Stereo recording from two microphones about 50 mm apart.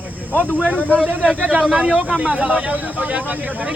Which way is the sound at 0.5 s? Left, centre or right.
Right.